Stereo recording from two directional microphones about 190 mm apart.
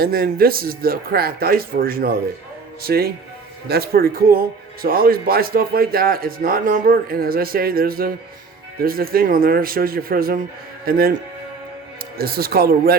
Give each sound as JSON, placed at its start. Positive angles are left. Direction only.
{"t": 0.0, "sound": "speech", "side_deg": -55}
{"t": 12.1, "sound": "speech", "side_deg": -55}